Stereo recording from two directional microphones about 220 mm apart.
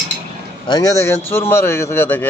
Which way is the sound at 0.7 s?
15° left (ahead or behind).